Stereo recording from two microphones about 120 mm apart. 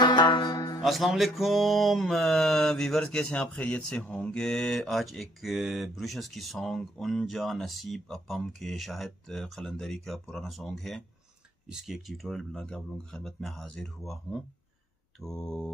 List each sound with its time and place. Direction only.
0.0 s music: 40° left (ahead or behind)
0.8 s mantra: centre (ahead or behind)